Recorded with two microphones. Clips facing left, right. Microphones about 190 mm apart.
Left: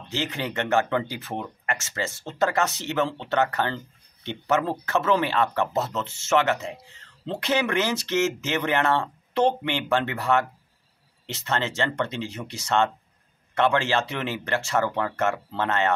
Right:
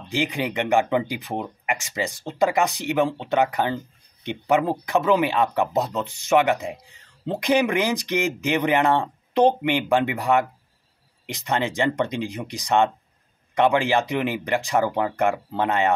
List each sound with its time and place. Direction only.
0.1 s speech: 15° right (ahead or behind)